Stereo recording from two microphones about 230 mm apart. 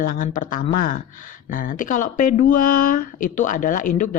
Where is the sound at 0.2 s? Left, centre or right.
Left.